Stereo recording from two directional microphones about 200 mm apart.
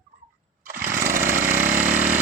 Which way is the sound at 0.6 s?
45° right (ahead or behind).